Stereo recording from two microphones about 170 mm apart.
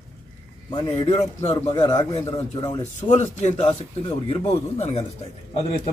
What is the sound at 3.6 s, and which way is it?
Speech, 30° left (ahead or behind).